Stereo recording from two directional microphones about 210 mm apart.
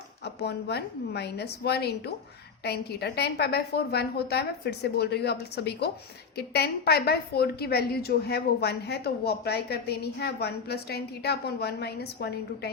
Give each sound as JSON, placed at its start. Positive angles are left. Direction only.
{"t": 0.3, "sound": "a woman's voice", "side_deg": 50}